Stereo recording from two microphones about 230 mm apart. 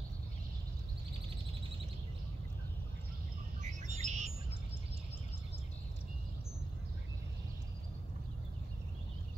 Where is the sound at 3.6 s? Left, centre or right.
Right.